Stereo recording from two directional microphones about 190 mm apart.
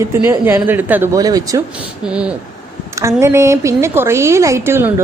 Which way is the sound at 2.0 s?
5° right (ahead or behind).